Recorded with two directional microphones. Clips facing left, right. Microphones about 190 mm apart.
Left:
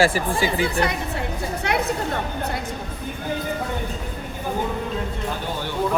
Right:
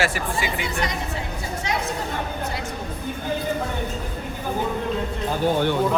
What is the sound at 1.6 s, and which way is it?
Chatter, 60° left (ahead or behind).